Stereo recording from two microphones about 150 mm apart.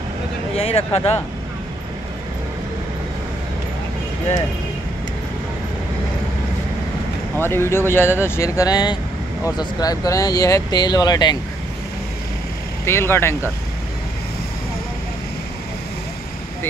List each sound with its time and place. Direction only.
0.6 s speech: 40° left (ahead or behind)
7.3 s speech: 15° left (ahead or behind)
12.8 s speech: 15° left (ahead or behind)